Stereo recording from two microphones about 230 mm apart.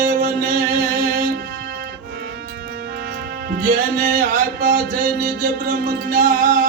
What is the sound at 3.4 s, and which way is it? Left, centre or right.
Music, right.